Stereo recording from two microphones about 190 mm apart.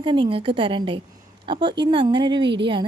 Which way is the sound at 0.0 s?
25° right (ahead or behind).